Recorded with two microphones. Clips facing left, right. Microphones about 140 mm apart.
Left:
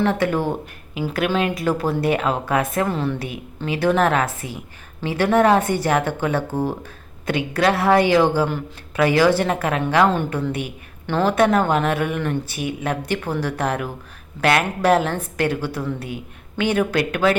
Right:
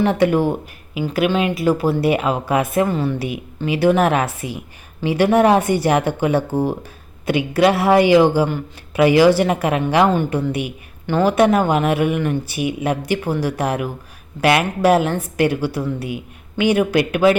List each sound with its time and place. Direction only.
0.0 s speech: 15° right (ahead or behind)
1.0 s speech: 5° right (ahead or behind)